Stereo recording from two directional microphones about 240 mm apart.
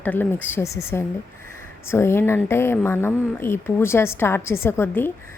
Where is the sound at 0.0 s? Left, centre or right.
Centre.